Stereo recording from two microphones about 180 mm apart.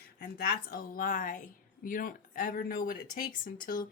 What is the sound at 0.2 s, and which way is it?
A woman's voice, 55° left (ahead or behind).